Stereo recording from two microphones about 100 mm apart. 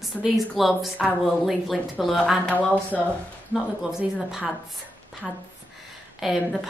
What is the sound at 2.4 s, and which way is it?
Speech, 15° left (ahead or behind).